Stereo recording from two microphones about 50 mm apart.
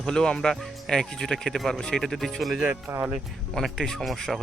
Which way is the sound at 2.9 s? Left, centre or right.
Right.